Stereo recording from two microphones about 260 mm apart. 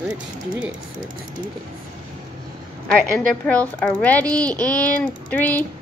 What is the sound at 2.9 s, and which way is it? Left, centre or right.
A child's voice, centre.